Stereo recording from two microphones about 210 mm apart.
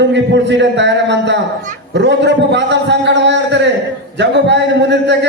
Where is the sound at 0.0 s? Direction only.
55° right (ahead or behind).